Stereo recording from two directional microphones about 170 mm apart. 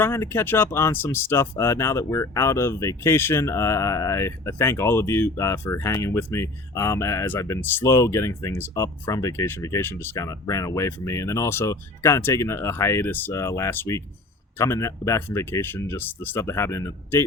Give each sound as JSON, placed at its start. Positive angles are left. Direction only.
{"t": 0.0, "sound": "speech", "side_deg": 15}